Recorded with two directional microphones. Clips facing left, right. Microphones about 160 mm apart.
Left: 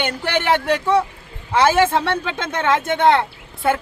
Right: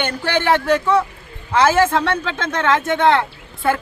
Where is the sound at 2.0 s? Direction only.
15° left (ahead or behind).